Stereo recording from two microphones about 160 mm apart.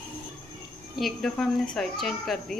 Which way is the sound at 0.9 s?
Centre (ahead or behind).